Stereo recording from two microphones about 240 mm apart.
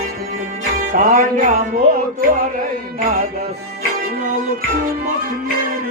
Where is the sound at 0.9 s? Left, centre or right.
Right.